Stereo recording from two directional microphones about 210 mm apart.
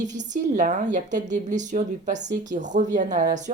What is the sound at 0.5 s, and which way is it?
Speech, 35° right (ahead or behind).